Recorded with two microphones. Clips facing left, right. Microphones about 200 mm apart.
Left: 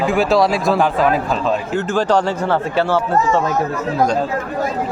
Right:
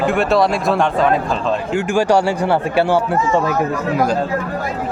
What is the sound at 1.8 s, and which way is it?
A man's voice, 10° right (ahead or behind).